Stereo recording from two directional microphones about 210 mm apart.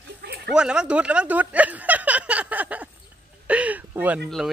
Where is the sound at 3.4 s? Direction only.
5° right (ahead or behind).